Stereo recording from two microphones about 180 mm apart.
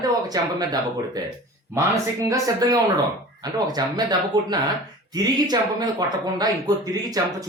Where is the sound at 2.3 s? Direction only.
20° right (ahead or behind).